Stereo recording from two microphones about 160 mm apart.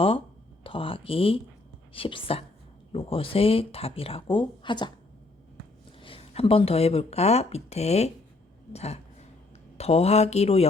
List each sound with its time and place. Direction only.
0.6 s speech: 35° left (ahead or behind)
6.0 s speech: 35° left (ahead or behind)